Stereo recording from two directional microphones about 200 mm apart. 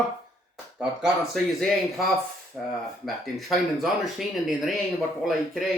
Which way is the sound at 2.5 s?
Centre (ahead or behind).